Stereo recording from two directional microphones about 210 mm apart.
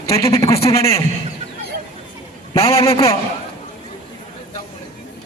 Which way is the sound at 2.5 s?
30° left (ahead or behind).